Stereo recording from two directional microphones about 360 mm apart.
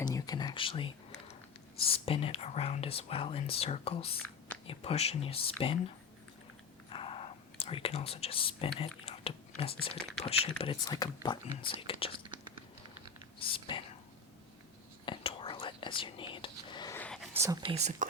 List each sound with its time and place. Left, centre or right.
0.0 s whispering: centre
1.8 s speech: centre
6.9 s whispering: centre
10.2 s speech: centre
13.4 s whispering: centre
15.0 s whispering: centre